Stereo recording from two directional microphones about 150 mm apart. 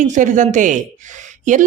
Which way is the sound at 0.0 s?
55° right (ahead or behind).